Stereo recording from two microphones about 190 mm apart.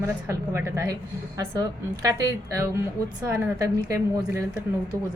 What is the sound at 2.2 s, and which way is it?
A woman's voice, 15° right (ahead or behind).